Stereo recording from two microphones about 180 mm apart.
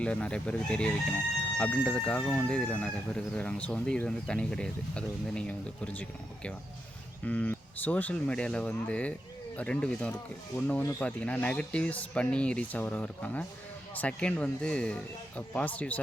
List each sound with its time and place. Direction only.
0.0 s speech: 5° left (ahead or behind)